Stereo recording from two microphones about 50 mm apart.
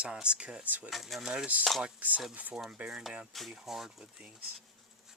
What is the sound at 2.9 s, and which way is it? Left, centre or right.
Speech, centre.